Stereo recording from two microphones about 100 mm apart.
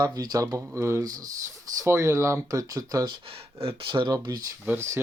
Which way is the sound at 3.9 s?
55° right (ahead or behind).